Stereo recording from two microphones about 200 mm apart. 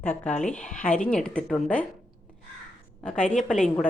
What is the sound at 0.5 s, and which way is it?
A woman's voice, 5° left (ahead or behind).